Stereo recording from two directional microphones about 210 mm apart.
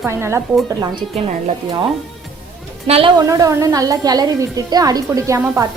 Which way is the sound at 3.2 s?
15° right (ahead or behind).